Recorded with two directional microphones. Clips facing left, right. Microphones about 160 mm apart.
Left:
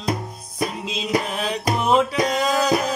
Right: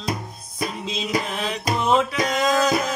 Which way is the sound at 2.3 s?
35° left (ahead or behind).